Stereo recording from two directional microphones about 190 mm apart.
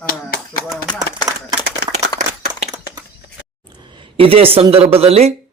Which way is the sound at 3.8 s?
25° right (ahead or behind).